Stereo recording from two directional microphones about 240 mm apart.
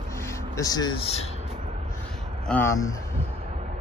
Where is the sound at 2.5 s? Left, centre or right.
Centre.